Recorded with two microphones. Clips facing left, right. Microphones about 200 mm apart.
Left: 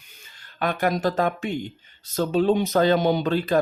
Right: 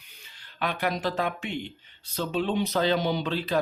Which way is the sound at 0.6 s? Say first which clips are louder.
Left 5 dB; 45° left (ahead or behind).